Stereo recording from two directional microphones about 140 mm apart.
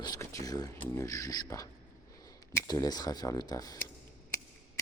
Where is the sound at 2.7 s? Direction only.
30° left (ahead or behind).